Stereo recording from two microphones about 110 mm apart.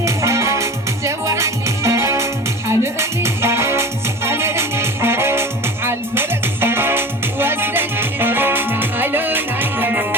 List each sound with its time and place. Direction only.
0.0 s music: 25° right (ahead or behind)